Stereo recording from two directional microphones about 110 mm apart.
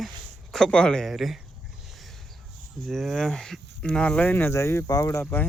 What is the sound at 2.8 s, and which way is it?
Speech, centre (ahead or behind).